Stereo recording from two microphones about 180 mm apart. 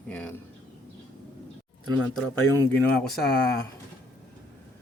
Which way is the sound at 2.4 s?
15° left (ahead or behind).